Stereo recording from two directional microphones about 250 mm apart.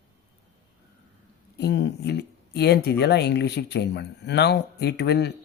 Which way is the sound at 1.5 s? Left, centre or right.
Left.